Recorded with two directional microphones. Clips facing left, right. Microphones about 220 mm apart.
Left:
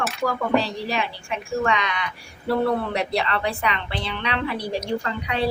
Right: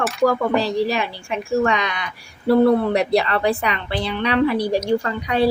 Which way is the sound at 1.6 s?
40° right (ahead or behind).